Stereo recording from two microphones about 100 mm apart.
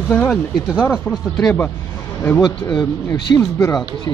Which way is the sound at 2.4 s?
Centre (ahead or behind).